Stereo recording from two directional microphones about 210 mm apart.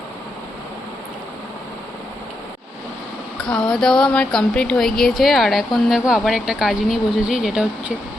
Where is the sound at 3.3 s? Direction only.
Centre (ahead or behind).